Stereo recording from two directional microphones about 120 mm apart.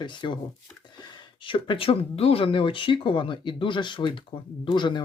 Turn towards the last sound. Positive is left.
turn(degrees=40)  # may be behind; listen again after turning